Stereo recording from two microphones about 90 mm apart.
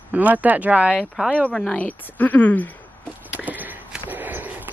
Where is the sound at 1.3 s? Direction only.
10° left (ahead or behind).